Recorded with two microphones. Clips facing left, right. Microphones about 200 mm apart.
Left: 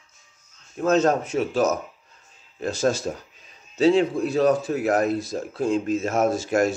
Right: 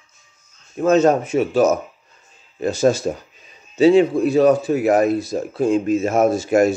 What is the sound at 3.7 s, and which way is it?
A man's voice, 5° right (ahead or behind).